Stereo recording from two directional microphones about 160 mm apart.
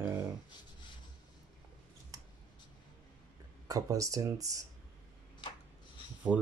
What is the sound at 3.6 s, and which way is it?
Speech, 20° right (ahead or behind).